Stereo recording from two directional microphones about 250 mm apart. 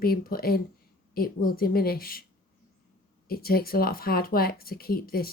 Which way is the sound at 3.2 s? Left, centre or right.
Left.